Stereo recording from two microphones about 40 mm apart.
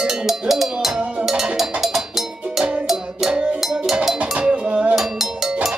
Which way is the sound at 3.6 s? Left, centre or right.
Centre.